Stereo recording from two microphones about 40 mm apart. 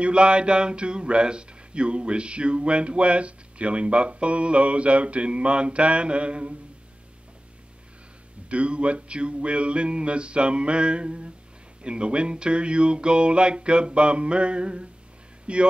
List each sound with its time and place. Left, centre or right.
0.0 s speech: right
8.5 s speech: right